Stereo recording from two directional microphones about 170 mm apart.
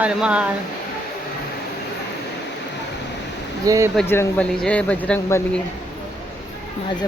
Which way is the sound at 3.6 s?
20° right (ahead or behind).